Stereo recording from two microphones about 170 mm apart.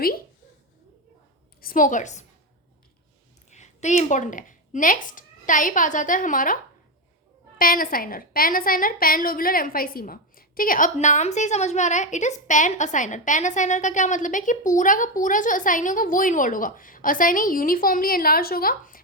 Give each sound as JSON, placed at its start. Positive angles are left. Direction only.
{"t": 1.6, "sound": "a woman's voice", "side_deg": 50}
{"t": 3.5, "sound": "speech", "side_deg": 45}
{"t": 7.6, "sound": "a woman's voice", "side_deg": 55}